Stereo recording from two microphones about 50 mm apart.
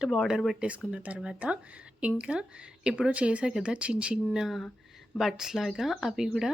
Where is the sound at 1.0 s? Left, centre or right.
Right.